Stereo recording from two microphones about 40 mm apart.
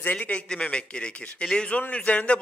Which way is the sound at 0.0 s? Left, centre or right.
Left.